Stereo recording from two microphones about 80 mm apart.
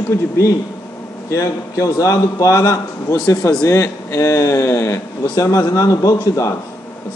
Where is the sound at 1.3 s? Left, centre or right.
Left.